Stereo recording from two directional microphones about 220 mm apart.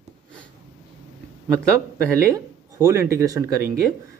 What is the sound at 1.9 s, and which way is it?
A man's voice, 10° right (ahead or behind).